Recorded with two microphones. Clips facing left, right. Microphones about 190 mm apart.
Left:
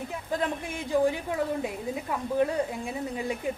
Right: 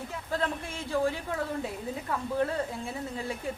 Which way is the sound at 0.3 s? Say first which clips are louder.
Left 2 dB; 15° left (ahead or behind).